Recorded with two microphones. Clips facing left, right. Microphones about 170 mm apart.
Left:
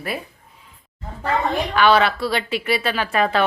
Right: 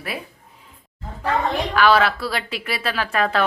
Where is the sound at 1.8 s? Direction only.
Centre (ahead or behind).